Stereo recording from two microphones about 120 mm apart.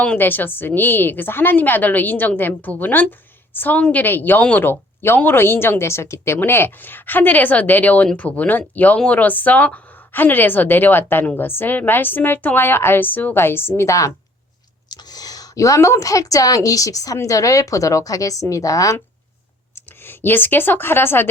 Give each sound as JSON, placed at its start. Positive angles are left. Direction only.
{"t": 0.0, "sound": "a woman's voice", "side_deg": 15}
{"t": 20.1, "sound": "a woman's voice", "side_deg": 15}